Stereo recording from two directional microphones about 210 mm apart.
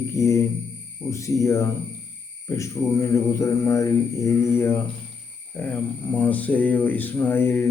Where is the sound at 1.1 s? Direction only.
15° left (ahead or behind).